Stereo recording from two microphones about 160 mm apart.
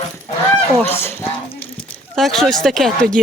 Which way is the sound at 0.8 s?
15° left (ahead or behind).